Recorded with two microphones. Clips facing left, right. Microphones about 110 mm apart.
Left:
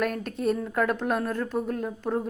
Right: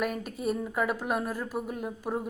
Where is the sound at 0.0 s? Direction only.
5° right (ahead or behind).